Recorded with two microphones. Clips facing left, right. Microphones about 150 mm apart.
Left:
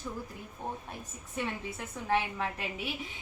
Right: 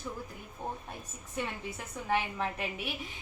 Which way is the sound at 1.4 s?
5° right (ahead or behind).